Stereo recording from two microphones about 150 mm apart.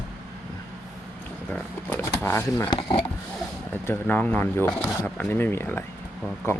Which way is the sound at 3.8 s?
15° left (ahead or behind).